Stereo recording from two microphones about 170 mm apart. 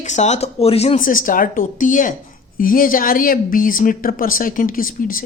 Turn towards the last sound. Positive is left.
turn(degrees=55)  # may be behind; listen again after turning